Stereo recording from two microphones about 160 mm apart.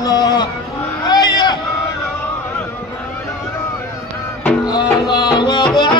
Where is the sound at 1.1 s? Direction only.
25° left (ahead or behind).